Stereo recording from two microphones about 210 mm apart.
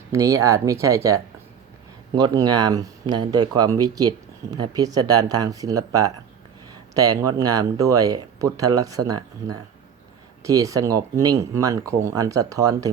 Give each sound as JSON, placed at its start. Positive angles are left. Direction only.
{"t": 0.1, "sound": "speech", "side_deg": -15}